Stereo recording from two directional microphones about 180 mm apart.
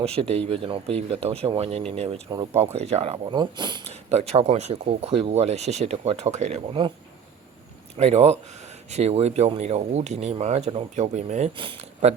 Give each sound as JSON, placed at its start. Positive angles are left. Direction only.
{"t": 0.0, "sound": "speech", "side_deg": -35}
{"t": 7.9, "sound": "speech", "side_deg": -35}